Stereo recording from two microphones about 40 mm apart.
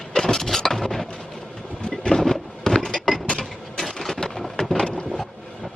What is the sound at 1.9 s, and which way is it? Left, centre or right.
Boat, centre.